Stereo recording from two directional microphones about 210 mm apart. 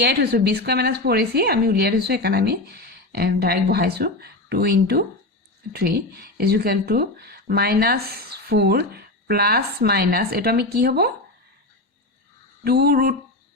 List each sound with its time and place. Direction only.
0.0 s speech: 50° right (ahead or behind)
12.6 s speech: 45° right (ahead or behind)